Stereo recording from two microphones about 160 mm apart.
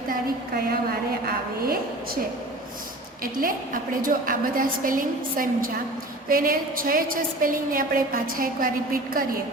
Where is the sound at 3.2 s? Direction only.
60° right (ahead or behind).